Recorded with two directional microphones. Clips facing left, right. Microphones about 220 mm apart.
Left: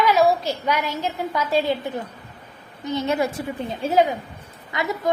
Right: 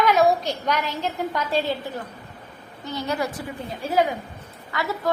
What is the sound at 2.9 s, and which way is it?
A woman's voice, 25° left (ahead or behind).